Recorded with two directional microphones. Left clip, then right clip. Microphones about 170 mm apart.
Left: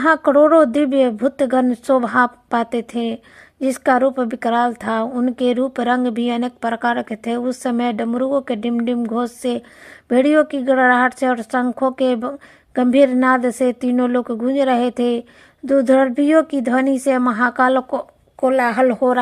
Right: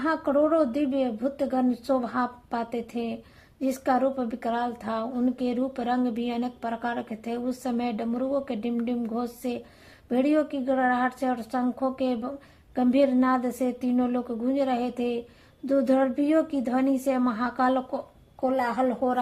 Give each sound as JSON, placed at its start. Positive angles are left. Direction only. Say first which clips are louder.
{"t": 0.0, "sound": "speech", "louder": "left 11 dB", "side_deg": 40}